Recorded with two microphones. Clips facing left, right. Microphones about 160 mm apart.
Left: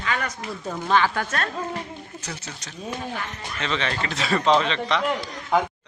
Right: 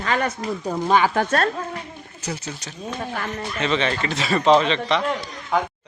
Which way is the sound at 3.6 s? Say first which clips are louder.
Right 4 dB; 5° right (ahead or behind).